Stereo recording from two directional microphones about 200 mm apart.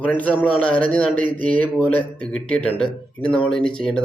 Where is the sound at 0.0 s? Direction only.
10° left (ahead or behind).